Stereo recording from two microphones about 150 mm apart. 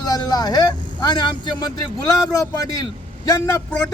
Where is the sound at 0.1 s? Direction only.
25° left (ahead or behind).